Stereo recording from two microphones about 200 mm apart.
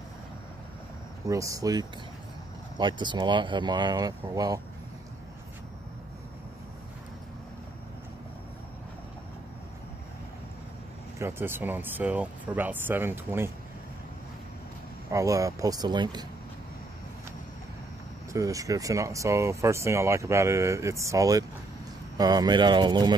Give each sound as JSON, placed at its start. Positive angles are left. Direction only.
{"t": 1.3, "sound": "speech", "side_deg": -15}
{"t": 11.1, "sound": "speech", "side_deg": -10}
{"t": 15.0, "sound": "speech", "side_deg": -15}
{"t": 18.3, "sound": "speech", "side_deg": -15}